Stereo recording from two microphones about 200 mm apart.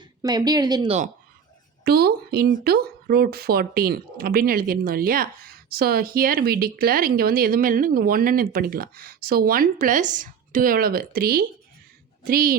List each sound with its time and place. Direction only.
0.2 s speech: 20° right (ahead or behind)
1.8 s speech: 50° right (ahead or behind)